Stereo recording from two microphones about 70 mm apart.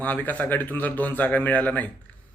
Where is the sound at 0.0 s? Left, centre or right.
Left.